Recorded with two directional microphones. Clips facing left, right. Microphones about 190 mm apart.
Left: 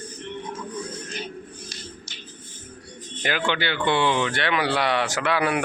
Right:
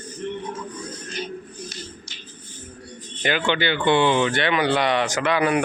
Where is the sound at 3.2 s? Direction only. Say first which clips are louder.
Right 3 dB; centre (ahead or behind).